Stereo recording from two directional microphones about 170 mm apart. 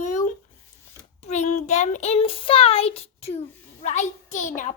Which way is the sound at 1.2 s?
40° left (ahead or behind).